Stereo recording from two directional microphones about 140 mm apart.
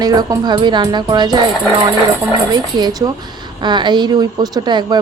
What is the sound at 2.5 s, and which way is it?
Speech, 30° right (ahead or behind).